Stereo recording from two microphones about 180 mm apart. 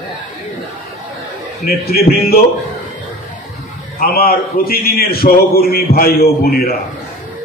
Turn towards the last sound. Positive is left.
turn(degrees=55)  # may be behind; listen again after turning